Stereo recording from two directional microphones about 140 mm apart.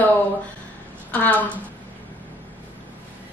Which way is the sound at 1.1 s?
10° left (ahead or behind).